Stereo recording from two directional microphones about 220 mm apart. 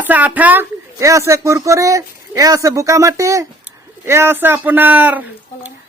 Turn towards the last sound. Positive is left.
turn(degrees=-10)  # may be behind; listen again after turning